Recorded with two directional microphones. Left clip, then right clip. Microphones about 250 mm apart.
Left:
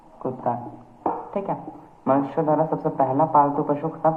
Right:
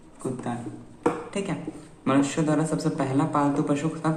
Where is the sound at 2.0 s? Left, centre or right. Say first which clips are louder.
Left 3 dB; centre.